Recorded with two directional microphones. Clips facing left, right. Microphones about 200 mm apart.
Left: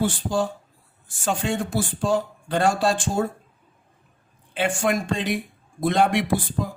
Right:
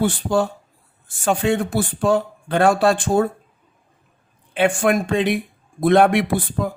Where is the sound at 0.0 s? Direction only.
60° right (ahead or behind).